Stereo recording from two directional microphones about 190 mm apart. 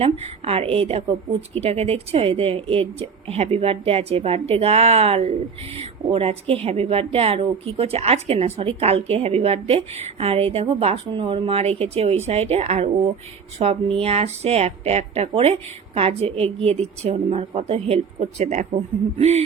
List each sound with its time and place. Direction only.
0.0 s a woman's voice: 30° right (ahead or behind)